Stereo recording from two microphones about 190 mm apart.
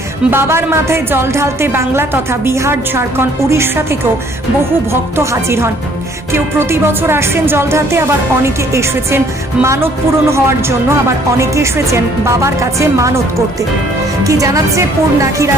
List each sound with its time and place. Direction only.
0.3 s a woman's voice: 15° right (ahead or behind)
5.1 s a woman's voice: 15° right (ahead or behind)
14.3 s a woman's voice: 15° right (ahead or behind)